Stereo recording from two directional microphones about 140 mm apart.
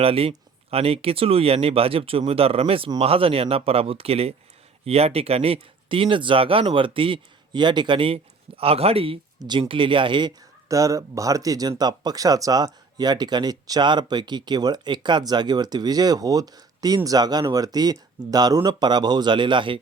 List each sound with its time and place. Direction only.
0.0 s speech: 45° right (ahead or behind)